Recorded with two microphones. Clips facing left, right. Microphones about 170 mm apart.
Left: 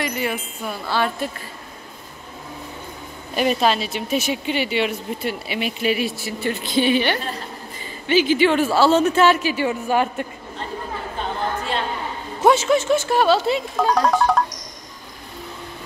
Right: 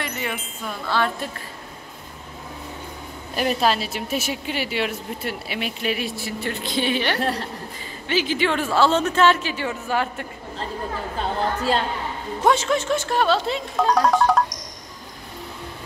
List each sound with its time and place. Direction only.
0.0 s speech: 5° left (ahead or behind)
3.3 s speech: centre (ahead or behind)
7.2 s a woman's voice: 75° right (ahead or behind)
8.1 s speech: centre (ahead or behind)
11.1 s a sound: 35° right (ahead or behind)
12.4 s speech: 5° left (ahead or behind)